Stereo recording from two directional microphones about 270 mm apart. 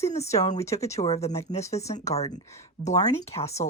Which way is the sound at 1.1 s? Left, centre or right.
Left.